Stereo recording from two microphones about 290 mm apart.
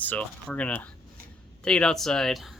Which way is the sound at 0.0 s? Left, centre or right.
Centre.